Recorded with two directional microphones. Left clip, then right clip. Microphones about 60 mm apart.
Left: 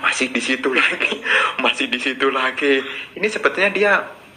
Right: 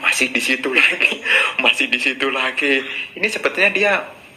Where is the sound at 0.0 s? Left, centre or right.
Left.